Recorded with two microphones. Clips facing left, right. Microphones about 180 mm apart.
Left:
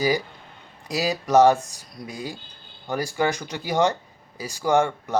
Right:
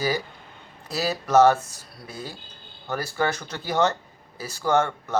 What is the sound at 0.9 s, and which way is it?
Speech, 15° left (ahead or behind).